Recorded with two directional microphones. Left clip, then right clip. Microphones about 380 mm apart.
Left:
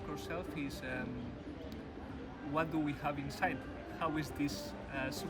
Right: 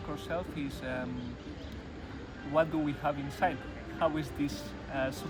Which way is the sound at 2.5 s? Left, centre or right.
Centre.